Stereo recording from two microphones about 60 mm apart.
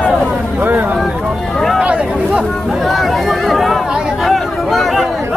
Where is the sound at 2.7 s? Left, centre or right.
Centre.